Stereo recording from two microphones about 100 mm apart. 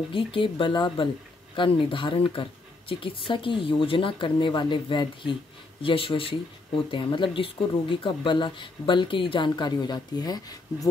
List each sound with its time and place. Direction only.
0.1 s speech: 60° left (ahead or behind); by 10.9 s 40° left (ahead or behind)